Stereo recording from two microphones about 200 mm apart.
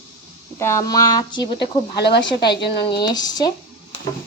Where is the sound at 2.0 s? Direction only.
55° left (ahead or behind).